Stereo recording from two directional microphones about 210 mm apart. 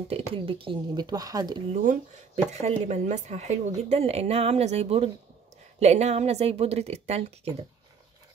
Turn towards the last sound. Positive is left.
turn(degrees=-30)  # may be behind; listen again after turning